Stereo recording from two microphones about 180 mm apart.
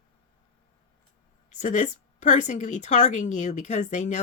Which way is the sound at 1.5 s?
40° left (ahead or behind).